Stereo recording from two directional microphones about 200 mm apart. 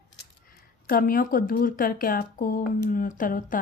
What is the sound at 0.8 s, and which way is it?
Speech, 45° left (ahead or behind).